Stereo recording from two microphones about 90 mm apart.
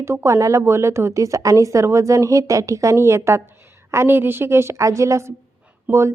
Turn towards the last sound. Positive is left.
turn(degrees=-30)  # may be behind; listen again after turning